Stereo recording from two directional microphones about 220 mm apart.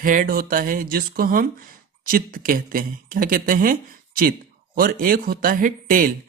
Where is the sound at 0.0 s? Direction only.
40° right (ahead or behind).